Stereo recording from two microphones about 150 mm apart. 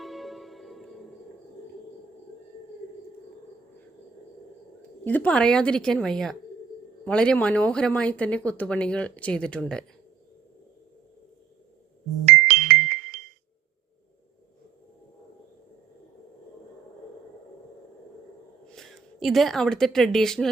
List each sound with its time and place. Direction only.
0.0 s music: centre (ahead or behind)
5.0 s a woman's voice: 10° left (ahead or behind)
12.2 s music: 70° right (ahead or behind)
18.7 s speech: centre (ahead or behind)